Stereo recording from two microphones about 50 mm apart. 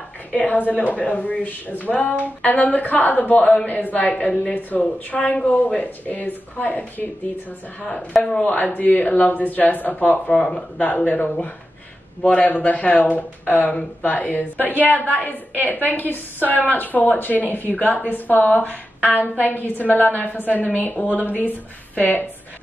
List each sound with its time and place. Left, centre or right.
0.3 s a woman's voice: left
7.8 s a woman's voice: centre
8.4 s a woman's voice: left
10.3 s a woman's voice: centre
10.8 s a woman's voice: left
12.2 s a woman's voice: left